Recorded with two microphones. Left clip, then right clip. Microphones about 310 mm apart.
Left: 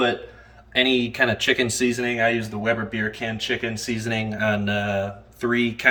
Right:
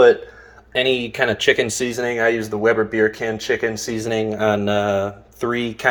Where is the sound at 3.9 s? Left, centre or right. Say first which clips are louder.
Right 5 dB; centre.